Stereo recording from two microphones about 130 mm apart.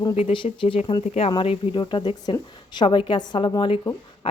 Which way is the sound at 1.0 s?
60° left (ahead or behind).